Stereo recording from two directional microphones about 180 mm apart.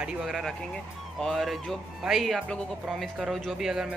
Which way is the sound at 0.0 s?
Centre (ahead or behind).